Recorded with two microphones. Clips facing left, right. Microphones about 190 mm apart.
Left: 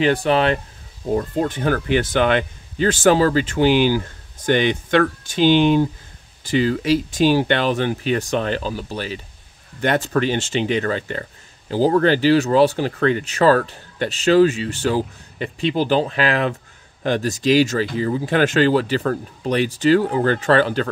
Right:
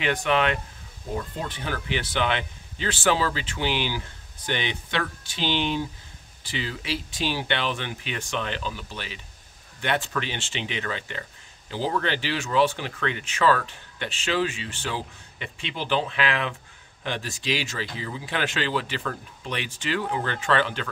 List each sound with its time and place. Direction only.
0.0 s speech: 35° left (ahead or behind)
1.1 s speech: 50° left (ahead or behind)